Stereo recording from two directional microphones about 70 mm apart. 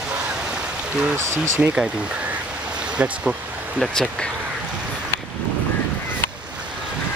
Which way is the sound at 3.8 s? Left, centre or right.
Centre.